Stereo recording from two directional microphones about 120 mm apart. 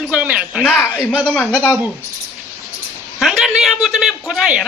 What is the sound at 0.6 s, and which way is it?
Speech, 15° left (ahead or behind).